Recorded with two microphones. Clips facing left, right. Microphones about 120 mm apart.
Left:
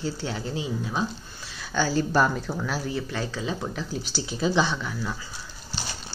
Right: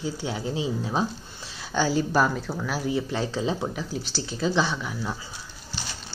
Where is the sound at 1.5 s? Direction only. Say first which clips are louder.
Right 1 dB; 20° right (ahead or behind).